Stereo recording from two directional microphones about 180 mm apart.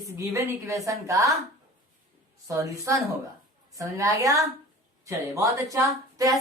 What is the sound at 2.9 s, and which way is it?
A woman's voice, 15° right (ahead or behind).